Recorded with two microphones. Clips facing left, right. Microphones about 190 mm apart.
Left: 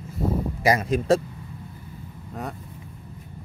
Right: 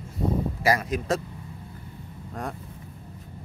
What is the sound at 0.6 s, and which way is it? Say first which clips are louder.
Speech: left 4 dB; 20° left (ahead or behind).